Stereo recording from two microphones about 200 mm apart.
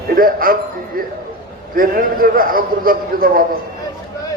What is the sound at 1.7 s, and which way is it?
A man's voice, 45° right (ahead or behind).